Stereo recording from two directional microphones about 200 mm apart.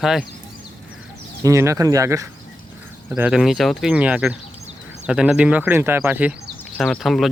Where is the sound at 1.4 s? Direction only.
15° right (ahead or behind).